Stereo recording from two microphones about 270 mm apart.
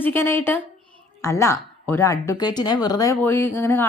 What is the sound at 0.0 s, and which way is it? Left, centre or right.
Speech, centre.